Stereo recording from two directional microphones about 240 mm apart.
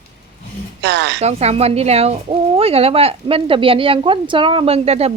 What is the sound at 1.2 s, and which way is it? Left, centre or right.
Speech, right.